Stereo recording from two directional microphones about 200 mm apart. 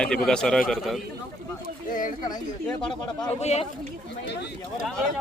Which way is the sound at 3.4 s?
35° left (ahead or behind).